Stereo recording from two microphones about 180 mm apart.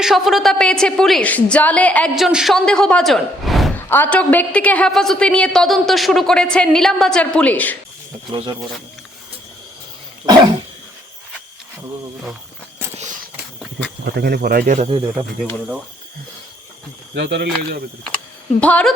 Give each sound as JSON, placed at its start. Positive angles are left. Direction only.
{"t": 0.0, "sound": "a woman's voice", "side_deg": 0}
{"t": 3.8, "sound": "a woman's voice", "side_deg": 10}
{"t": 8.3, "sound": "speech", "side_deg": -25}
{"t": 10.3, "sound": "speech", "side_deg": -25}
{"t": 13.3, "sound": "a sound", "side_deg": -10}
{"t": 14.0, "sound": "speech", "side_deg": -65}
{"t": 17.2, "sound": "speech", "side_deg": -70}
{"t": 18.6, "sound": "a woman's voice", "side_deg": 5}